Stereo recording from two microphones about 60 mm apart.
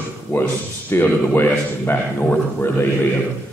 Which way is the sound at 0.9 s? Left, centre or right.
Left.